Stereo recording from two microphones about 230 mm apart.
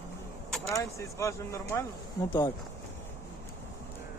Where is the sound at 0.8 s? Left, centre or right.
Centre.